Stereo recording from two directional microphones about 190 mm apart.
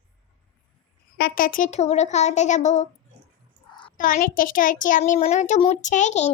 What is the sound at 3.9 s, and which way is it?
A child's voice, 45° left (ahead or behind).